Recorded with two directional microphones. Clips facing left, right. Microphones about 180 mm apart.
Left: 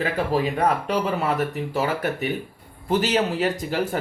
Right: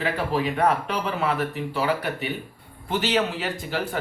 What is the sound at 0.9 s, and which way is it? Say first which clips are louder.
Speech: left 3 dB; 45° left (ahead or behind).